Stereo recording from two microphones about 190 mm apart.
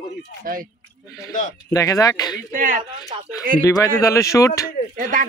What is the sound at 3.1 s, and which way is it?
Speech, 30° right (ahead or behind).